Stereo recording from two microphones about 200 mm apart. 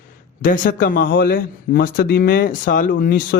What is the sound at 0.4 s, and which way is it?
Speech, 45° left (ahead or behind).